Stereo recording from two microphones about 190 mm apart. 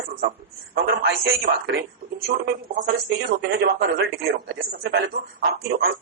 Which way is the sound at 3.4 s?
55° right (ahead or behind).